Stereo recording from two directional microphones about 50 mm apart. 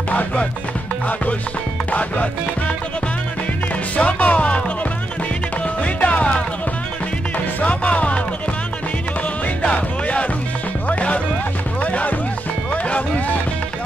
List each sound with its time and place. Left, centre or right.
0.1 s music: left
1.9 s music: left
3.9 s music: left
5.8 s music: left
9.6 s music: left